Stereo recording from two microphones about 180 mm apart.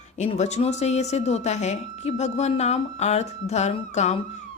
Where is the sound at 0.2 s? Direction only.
40° left (ahead or behind).